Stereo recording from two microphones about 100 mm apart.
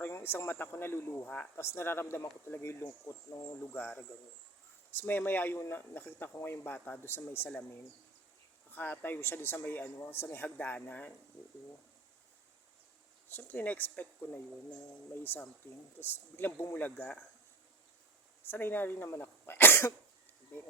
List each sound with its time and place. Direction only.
0.1 s speech: 25° left (ahead or behind)
8.7 s speech: 20° left (ahead or behind)
13.2 s speech: 20° left (ahead or behind)
18.4 s speech: 20° left (ahead or behind)